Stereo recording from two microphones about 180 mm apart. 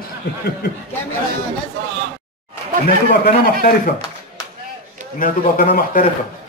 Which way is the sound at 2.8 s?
55° left (ahead or behind).